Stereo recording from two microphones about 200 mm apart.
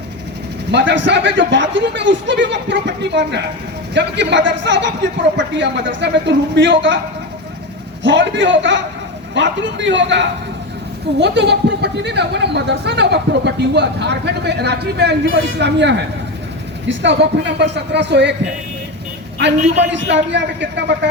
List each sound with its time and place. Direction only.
0.7 s speech: 60° right (ahead or behind)
8.0 s speech: 65° right (ahead or behind)
19.9 s speech: 65° right (ahead or behind)